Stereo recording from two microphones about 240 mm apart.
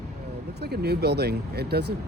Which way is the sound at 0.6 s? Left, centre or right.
Right.